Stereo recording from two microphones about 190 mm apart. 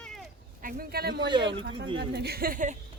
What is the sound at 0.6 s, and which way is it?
Speech, 50° right (ahead or behind).